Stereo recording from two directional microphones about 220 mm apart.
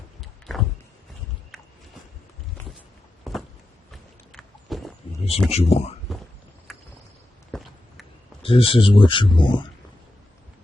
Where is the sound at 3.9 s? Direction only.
Centre (ahead or behind).